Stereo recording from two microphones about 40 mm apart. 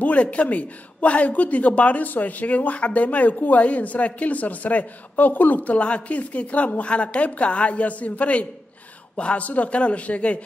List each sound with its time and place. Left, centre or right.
0.0 s speech: left